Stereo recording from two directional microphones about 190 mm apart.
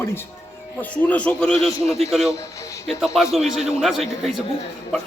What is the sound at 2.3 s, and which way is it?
Speech, 15° left (ahead or behind).